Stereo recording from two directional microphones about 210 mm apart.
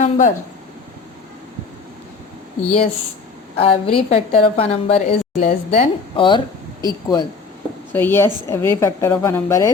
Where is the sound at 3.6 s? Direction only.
25° left (ahead or behind).